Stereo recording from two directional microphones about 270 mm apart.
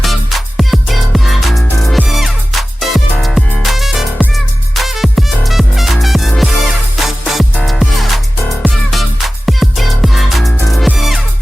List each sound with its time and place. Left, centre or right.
0.0 s music: centre